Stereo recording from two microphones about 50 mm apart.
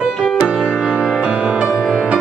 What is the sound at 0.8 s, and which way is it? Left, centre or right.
Music, right.